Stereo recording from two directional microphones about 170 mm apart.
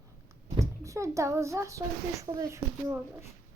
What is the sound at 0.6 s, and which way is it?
A child's voice, 15° right (ahead or behind).